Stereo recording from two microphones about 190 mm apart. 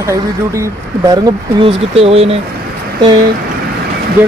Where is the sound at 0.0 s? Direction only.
15° right (ahead or behind); by 2.3 s 30° right (ahead or behind).